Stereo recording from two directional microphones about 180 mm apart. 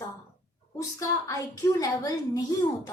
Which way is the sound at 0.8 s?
20° left (ahead or behind).